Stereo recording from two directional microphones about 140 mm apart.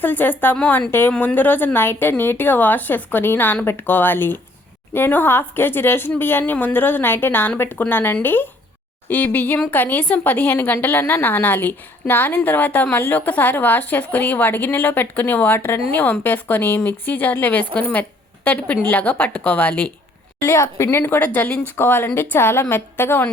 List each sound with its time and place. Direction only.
0.0 s a woman's voice: 15° left (ahead or behind)